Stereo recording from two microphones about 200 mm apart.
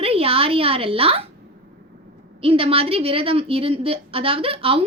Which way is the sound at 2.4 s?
30° right (ahead or behind).